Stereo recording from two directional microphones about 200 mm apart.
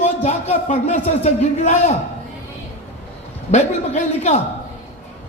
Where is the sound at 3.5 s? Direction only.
35° left (ahead or behind).